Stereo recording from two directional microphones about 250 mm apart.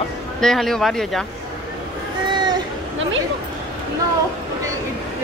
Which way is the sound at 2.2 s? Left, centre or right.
Centre.